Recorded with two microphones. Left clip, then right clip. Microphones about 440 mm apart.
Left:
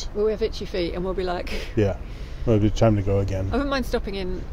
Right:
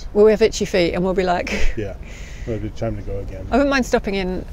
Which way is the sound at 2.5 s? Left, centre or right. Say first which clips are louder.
Left 6 dB; left.